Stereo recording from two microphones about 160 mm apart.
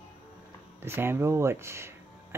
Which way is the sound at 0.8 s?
15° right (ahead or behind).